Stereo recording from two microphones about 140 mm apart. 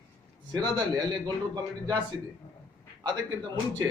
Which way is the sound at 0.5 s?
30° right (ahead or behind).